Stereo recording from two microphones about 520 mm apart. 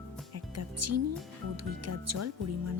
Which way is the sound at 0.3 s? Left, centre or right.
Right.